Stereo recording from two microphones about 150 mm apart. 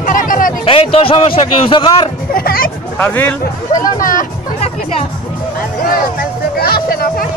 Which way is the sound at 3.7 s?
65° left (ahead or behind).